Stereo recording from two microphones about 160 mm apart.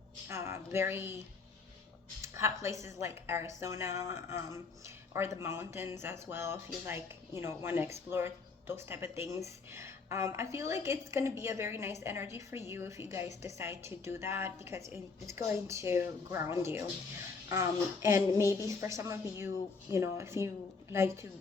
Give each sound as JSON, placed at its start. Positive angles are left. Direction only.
{"t": 0.3, "sound": "speech", "side_deg": -20}
{"t": 2.2, "sound": "a woman's voice", "side_deg": -15}